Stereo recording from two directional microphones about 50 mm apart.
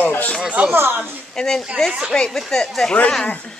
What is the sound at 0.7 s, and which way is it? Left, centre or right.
Speech, right.